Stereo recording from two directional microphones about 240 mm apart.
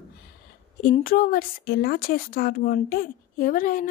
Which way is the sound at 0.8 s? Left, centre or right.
Left.